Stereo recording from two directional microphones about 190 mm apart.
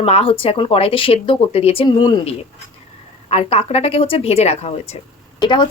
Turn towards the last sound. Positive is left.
turn(degrees=25)  # may be behind; listen again after turning